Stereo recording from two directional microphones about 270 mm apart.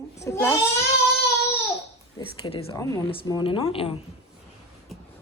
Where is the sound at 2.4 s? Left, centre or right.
Centre.